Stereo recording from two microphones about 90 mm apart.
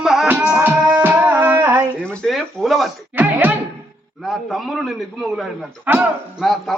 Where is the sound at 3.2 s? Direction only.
20° right (ahead or behind).